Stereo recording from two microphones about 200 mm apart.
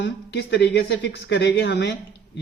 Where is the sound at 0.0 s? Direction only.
60° left (ahead or behind).